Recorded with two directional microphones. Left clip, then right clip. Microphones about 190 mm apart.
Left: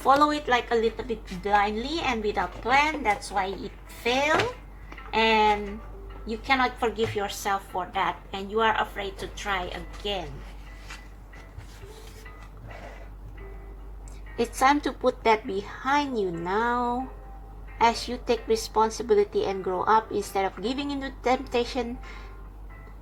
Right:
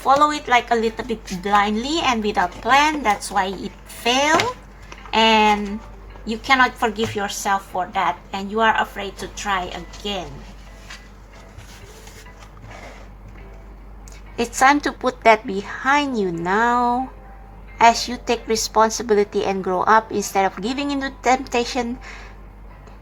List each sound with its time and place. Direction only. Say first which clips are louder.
0.0 s speech: right 5 dB; centre (ahead or behind)
14.3 s speech: right 6 dB; 15° right (ahead or behind)